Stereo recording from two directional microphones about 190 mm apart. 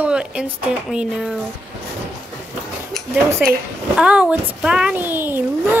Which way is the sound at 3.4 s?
5° right (ahead or behind).